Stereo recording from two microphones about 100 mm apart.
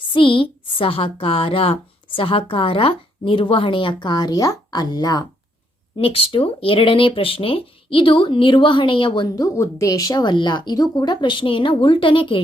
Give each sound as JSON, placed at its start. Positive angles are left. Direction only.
{"t": 0.1, "sound": "a woman's voice", "side_deg": 60}
{"t": 6.0, "sound": "a woman's voice", "side_deg": 70}